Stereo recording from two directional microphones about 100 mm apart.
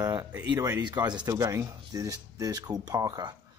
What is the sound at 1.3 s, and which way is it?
Speech, 30° right (ahead or behind).